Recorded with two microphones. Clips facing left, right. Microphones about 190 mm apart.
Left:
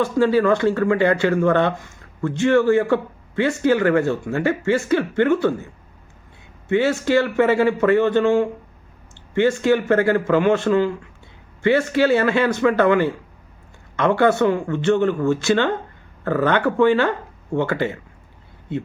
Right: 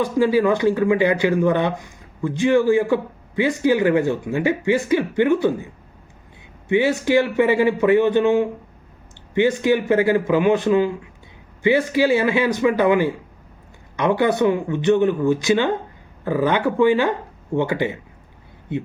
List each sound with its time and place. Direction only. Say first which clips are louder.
0.0 s speech: even; 10° right (ahead or behind)
6.7 s speech: even; 15° right (ahead or behind)